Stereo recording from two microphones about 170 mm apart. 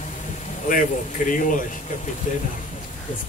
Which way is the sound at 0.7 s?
55° left (ahead or behind).